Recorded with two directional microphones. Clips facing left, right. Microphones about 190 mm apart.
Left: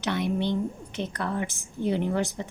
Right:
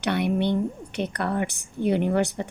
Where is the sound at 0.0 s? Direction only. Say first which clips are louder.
Right 3 dB; 65° right (ahead or behind).